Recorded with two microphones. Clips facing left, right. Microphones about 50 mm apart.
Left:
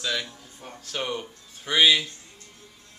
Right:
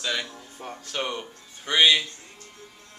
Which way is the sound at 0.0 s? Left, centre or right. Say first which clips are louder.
Even; centre.